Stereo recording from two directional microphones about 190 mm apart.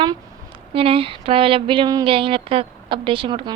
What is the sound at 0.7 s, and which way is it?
A woman's voice, 30° right (ahead or behind).